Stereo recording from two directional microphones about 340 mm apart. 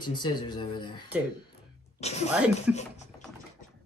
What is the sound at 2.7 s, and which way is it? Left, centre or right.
Speech, centre.